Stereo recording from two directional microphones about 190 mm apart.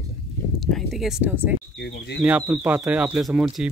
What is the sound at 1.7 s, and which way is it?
Speech, 65° left (ahead or behind).